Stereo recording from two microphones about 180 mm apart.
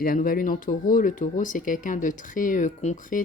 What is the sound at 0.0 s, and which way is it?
Speech, 50° left (ahead or behind).